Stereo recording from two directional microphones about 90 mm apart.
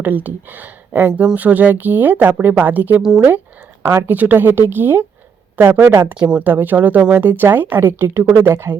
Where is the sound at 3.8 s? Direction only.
35° right (ahead or behind).